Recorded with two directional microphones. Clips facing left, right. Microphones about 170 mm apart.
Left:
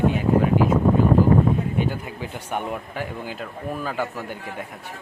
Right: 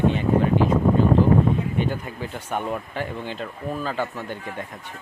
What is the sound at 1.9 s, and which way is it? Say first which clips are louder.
Speech: even; 10° left (ahead or behind).